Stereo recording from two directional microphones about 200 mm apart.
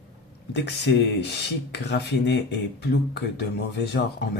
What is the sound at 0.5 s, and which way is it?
Speech, 60° left (ahead or behind).